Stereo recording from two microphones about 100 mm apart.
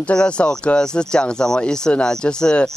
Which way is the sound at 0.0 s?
10° left (ahead or behind).